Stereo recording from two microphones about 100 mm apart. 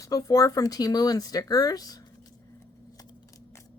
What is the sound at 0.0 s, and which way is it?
Speech, 35° left (ahead or behind).